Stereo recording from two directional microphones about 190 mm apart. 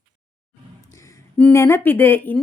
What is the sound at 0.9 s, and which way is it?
Speech, 15° left (ahead or behind).